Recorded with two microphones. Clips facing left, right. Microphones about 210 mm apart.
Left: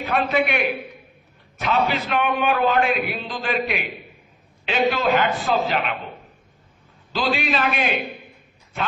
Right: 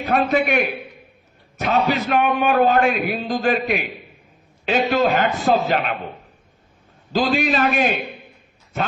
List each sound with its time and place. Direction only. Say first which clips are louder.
0.0 s a man's voice: right 3 dB; 45° right (ahead or behind)
7.1 s a man's voice: right 4 dB; 45° right (ahead or behind)